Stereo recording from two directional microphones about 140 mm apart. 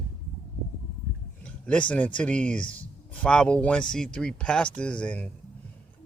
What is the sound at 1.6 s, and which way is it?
Speech, 10° left (ahead or behind).